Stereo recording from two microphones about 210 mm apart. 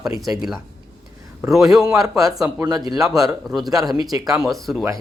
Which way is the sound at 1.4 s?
5° right (ahead or behind).